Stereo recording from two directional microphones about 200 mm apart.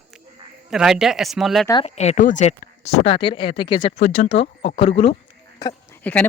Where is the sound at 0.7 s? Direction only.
5° right (ahead or behind).